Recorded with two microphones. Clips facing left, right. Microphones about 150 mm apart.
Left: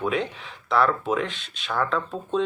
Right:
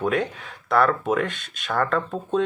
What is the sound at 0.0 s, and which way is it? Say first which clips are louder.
Speech: right 2 dB; 50° right (ahead or behind).